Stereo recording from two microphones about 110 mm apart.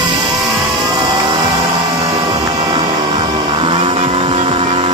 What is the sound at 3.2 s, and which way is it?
Music, 45° right (ahead or behind).